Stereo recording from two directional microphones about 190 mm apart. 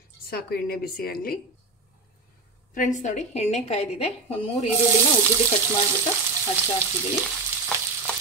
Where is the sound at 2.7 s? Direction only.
40° left (ahead or behind).